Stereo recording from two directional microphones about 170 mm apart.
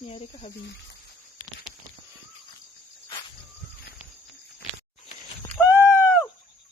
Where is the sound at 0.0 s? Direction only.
35° left (ahead or behind).